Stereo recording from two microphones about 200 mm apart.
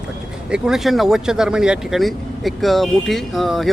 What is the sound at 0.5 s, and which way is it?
Speech, centre (ahead or behind).